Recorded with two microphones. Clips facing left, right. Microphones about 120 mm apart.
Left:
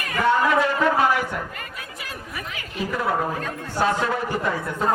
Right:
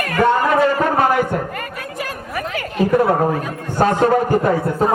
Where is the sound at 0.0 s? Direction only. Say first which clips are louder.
Right 4 dB; 55° right (ahead or behind).